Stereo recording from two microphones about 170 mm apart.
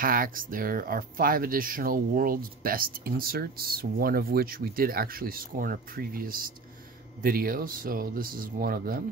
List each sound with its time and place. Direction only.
0.0 s speech: 55° right (ahead or behind)